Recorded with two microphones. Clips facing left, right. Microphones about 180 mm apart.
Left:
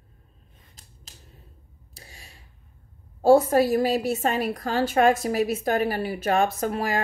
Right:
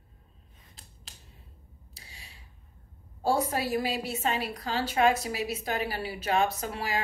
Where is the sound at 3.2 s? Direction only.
45° left (ahead or behind).